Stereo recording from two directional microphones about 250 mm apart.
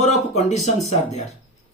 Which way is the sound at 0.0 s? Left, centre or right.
Left.